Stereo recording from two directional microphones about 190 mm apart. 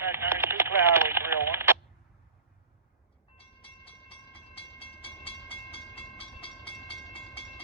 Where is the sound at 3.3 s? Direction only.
30° left (ahead or behind).